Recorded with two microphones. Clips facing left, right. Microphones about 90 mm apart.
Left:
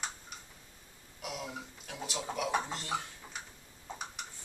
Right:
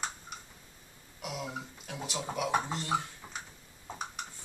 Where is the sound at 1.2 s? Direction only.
5° right (ahead or behind).